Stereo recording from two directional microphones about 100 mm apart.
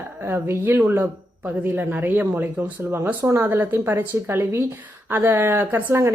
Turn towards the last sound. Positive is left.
turn(degrees=-25)  # may be behind; listen again after turning